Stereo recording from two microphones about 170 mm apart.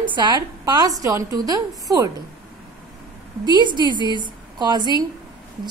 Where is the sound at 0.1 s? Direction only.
25° right (ahead or behind).